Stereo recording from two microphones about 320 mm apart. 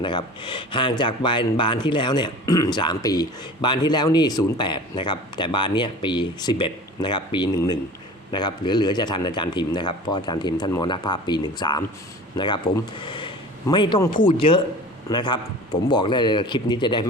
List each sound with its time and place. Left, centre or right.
0.0 s a man's voice: centre